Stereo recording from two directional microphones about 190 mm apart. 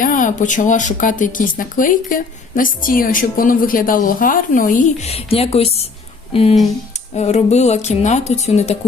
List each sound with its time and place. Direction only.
0.0 s a woman's voice: 45° left (ahead or behind)